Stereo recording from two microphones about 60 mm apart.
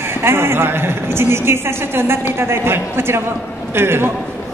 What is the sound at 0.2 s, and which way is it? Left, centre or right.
A woman's voice, right.